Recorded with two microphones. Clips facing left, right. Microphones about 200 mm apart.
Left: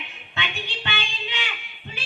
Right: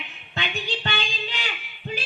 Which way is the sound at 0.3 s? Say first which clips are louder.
Right 3 dB; 40° right (ahead or behind).